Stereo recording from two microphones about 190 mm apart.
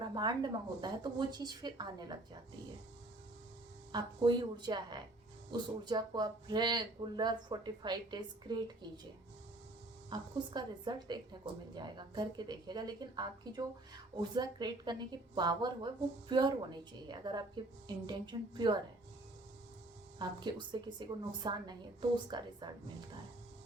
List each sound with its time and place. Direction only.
0.0 s a woman's voice: 25° right (ahead or behind)
3.9 s a woman's voice: 20° right (ahead or behind)
10.1 s a woman's voice: 20° right (ahead or behind)
20.1 s a woman's voice: 25° right (ahead or behind)